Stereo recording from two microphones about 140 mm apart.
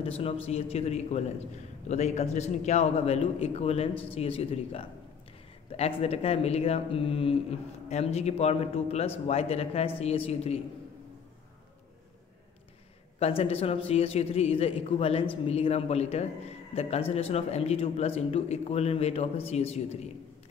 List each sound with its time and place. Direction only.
0.2 s a man's voice: 45° left (ahead or behind)
13.2 s a man's voice: 45° left (ahead or behind)